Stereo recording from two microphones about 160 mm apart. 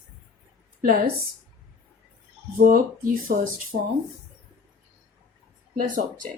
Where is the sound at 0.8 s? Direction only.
70° right (ahead or behind).